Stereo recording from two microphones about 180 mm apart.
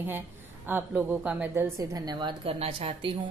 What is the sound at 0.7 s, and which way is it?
A woman's voice, 10° right (ahead or behind).